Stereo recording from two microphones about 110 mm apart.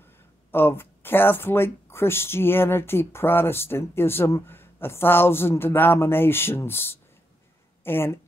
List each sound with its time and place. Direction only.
0.5 s speech: 20° left (ahead or behind)